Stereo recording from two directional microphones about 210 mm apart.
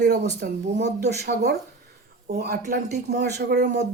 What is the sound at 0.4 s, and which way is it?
Speech, 50° right (ahead or behind).